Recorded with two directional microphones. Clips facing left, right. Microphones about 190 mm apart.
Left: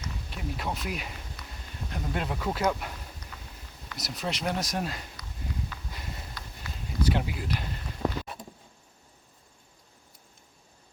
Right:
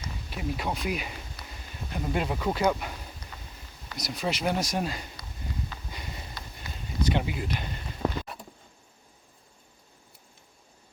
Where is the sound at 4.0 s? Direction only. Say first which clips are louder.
Right 3 dB; centre (ahead or behind).